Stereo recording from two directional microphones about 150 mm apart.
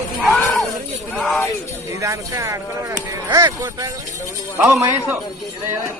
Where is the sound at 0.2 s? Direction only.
Centre (ahead or behind).